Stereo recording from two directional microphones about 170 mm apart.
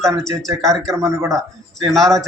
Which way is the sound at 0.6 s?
Centre (ahead or behind).